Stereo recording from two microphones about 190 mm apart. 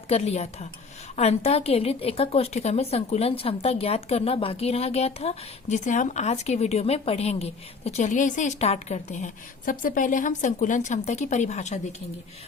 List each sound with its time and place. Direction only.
0.1 s a woman's voice: 35° left (ahead or behind)